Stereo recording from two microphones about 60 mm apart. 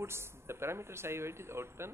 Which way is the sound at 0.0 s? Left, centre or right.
Right.